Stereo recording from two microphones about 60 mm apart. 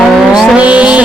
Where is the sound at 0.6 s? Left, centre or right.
Right.